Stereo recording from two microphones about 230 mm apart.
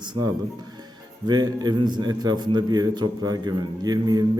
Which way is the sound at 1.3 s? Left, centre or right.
Centre.